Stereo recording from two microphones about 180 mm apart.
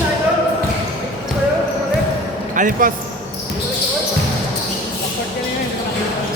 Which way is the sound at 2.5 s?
50° right (ahead or behind).